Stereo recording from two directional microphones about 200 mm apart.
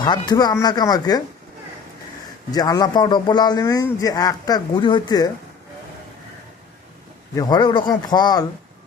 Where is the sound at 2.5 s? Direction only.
20° left (ahead or behind).